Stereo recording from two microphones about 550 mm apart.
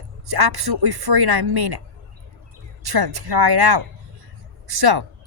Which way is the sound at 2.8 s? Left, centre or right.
Right.